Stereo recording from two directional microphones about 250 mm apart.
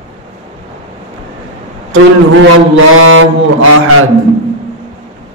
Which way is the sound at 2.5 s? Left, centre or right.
Right.